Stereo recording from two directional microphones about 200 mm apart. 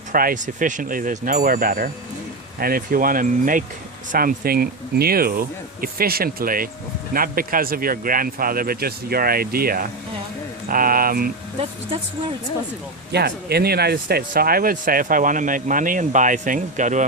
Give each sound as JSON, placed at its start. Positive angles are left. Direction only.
{"t": 0.1, "sound": "speech", "side_deg": -45}
{"t": 13.1, "sound": "speech", "side_deg": -55}